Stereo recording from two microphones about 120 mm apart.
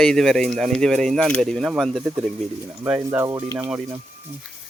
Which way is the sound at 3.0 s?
25° right (ahead or behind).